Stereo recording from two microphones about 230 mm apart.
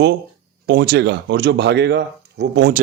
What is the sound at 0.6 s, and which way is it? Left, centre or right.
Speech, right.